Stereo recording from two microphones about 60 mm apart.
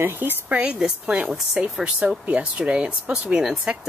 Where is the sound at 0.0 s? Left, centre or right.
Right.